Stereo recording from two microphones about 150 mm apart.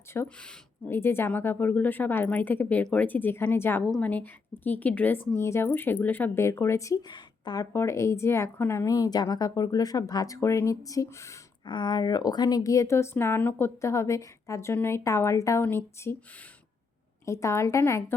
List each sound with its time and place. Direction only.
0.4 s speech: 15° left (ahead or behind)
11.6 s speech: 30° left (ahead or behind); by 16.1 s 15° left (ahead or behind)
17.2 s speech: 20° left (ahead or behind)